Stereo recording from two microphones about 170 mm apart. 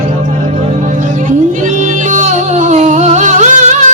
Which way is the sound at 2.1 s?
45° right (ahead or behind).